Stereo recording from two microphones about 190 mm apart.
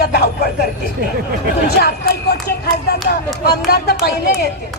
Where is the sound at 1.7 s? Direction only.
60° left (ahead or behind).